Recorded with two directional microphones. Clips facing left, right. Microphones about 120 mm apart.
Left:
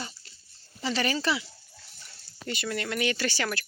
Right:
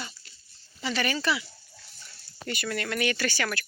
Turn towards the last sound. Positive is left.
turn(degrees=30)  # may be behind; listen again after turning